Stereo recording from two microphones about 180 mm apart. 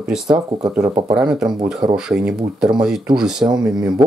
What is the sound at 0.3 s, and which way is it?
Speech, 20° right (ahead or behind).